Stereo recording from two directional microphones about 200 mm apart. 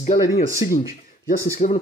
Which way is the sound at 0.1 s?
20° left (ahead or behind).